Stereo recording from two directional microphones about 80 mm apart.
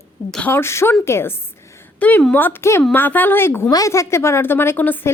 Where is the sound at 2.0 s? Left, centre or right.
Centre.